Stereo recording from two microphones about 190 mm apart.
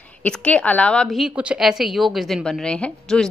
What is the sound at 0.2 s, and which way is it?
A woman's voice, 5° left (ahead or behind).